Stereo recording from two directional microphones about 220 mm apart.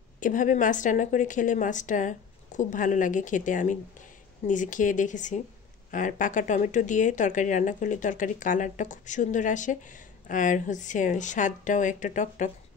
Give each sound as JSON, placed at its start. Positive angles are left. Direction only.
{"t": 0.2, "sound": "speech", "side_deg": 35}